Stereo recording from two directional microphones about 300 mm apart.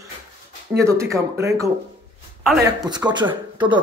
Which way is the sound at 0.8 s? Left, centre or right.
Centre.